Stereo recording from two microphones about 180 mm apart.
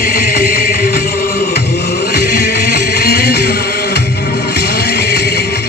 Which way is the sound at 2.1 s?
65° left (ahead or behind).